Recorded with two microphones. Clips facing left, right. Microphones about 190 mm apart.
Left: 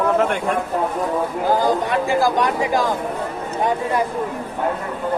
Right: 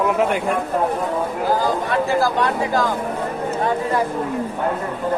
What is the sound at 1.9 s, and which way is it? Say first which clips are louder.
Speech: left 1 dB; 15° left (ahead or behind).